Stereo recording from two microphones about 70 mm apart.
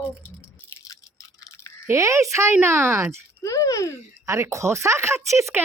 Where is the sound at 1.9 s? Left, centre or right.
Right.